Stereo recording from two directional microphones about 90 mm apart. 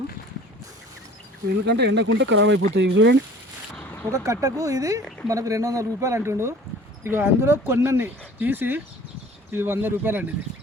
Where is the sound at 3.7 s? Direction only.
20° left (ahead or behind).